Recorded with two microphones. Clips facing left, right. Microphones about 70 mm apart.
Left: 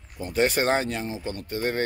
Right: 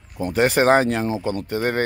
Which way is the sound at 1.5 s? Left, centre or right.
Right.